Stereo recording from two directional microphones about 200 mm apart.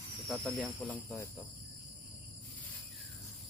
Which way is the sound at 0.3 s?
5° left (ahead or behind).